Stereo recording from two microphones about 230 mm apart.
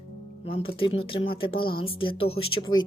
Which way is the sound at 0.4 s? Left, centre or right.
Left.